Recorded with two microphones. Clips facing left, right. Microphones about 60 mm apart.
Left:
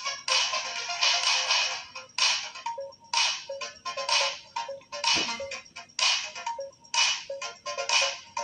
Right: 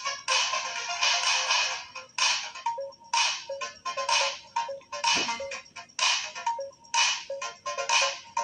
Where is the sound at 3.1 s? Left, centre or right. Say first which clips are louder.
Right 2 dB; centre.